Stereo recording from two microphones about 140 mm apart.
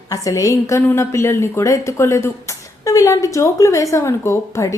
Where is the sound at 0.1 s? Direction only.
25° left (ahead or behind).